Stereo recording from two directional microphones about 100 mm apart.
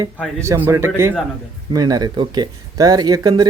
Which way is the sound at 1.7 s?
40° right (ahead or behind).